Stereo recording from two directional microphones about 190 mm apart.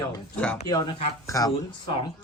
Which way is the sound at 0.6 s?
25° left (ahead or behind).